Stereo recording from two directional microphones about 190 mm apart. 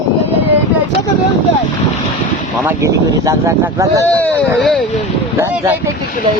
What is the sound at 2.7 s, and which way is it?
Speech, 15° right (ahead or behind).